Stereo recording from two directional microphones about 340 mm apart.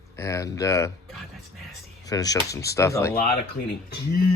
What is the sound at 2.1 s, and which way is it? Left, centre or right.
A man's voice, centre.